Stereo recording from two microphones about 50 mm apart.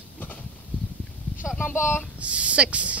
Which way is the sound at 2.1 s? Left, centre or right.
Right.